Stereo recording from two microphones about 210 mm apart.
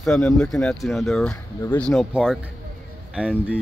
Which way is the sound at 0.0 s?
5° left (ahead or behind).